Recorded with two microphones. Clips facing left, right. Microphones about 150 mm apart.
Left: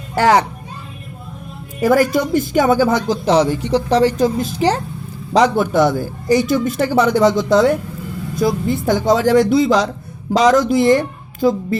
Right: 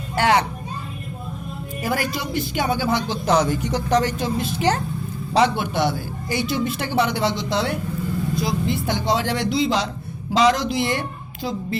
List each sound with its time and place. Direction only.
0.2 s a woman's voice: 40° left (ahead or behind)
1.8 s a man's voice: 45° left (ahead or behind)
3.2 s a woman's voice: 30° left (ahead or behind)